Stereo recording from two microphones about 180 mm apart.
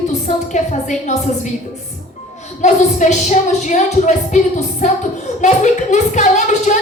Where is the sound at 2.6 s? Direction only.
40° left (ahead or behind).